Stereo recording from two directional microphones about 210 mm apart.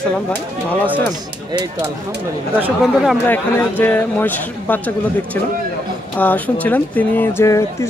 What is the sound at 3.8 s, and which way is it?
Speech, 10° left (ahead or behind).